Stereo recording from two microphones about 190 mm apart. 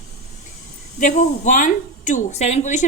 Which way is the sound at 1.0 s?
40° left (ahead or behind).